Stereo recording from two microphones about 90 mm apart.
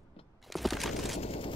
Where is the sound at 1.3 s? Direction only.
80° left.